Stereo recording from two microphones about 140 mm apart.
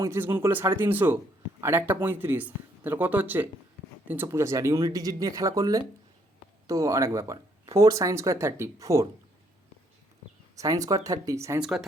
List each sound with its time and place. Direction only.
0.0 s speech: 15° right (ahead or behind)
10.5 s speech: 25° right (ahead or behind)
11.6 s speech: 5° right (ahead or behind)